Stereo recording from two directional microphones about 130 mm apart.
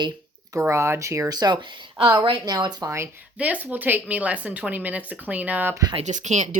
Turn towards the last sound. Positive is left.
turn(degrees=-65)  # may be behind; listen again after turning